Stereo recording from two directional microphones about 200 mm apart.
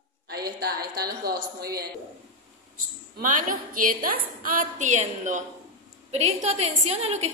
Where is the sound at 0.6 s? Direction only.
50° right (ahead or behind).